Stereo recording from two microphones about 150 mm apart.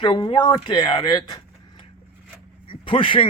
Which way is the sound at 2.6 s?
35° left (ahead or behind).